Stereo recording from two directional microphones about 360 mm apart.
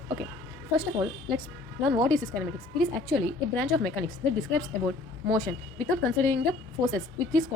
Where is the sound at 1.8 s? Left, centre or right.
Centre.